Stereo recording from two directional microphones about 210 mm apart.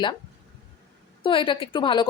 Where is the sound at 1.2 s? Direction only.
25° left (ahead or behind).